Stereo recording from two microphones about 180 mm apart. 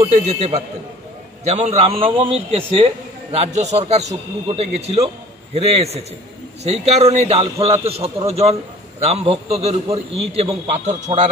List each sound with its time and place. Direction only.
0.0 s a man's voice: 35° right (ahead or behind)